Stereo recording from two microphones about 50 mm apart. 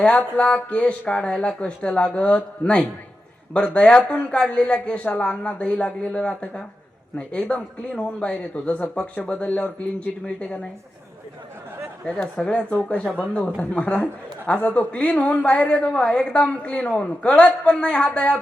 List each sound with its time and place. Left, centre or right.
0.3 s speech: left
12.0 s speech: centre
12.8 s speech: left